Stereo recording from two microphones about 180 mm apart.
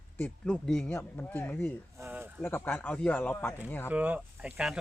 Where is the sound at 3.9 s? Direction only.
10° right (ahead or behind).